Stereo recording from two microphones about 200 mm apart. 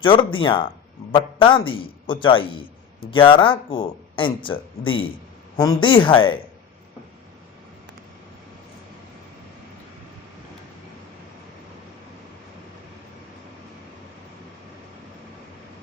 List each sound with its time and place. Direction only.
0.0 s a man's voice: 25° left (ahead or behind)